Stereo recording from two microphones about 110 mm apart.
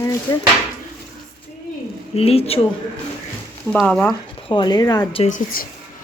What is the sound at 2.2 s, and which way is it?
Speech, 65° left (ahead or behind).